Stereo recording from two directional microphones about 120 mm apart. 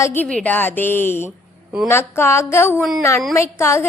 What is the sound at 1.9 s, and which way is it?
A woman's voice, 20° left (ahead or behind).